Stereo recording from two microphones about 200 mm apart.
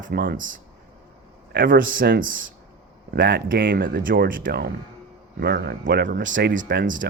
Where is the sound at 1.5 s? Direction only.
50° right (ahead or behind).